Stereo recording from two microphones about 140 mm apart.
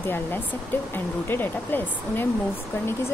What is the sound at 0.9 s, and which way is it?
Speech, 15° left (ahead or behind).